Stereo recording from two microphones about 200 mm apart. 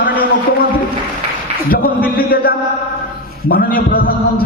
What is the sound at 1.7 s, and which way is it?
A man's voice, 45° left (ahead or behind).